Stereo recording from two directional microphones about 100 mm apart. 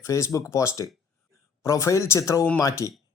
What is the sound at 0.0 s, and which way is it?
Speech, 30° left (ahead or behind).